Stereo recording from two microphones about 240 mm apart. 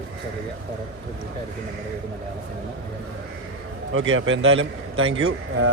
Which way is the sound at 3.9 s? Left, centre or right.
Right.